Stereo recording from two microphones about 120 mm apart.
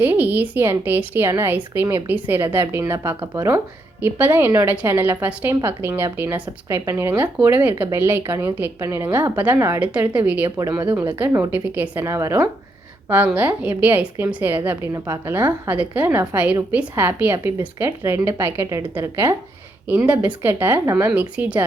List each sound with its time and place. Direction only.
0.0 s a woman's voice: 15° right (ahead or behind)
10.6 s a woman's voice: 30° right (ahead or behind)
11.2 s a woman's voice: 15° right (ahead or behind)
13.1 s a woman's voice: 15° right (ahead or behind)
21.1 s a woman's voice: 10° right (ahead or behind)